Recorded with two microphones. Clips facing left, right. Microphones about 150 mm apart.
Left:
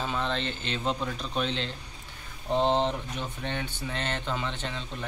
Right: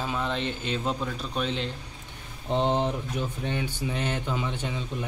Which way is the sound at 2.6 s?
20° left (ahead or behind).